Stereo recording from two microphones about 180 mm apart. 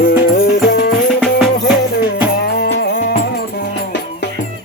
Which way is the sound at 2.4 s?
65° left (ahead or behind).